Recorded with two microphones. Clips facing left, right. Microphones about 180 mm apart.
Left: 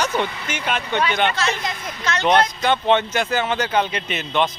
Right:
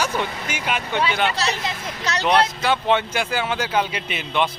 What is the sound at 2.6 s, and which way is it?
Speech, 5° right (ahead or behind).